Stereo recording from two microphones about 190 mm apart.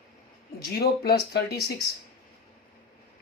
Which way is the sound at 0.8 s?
55° left (ahead or behind).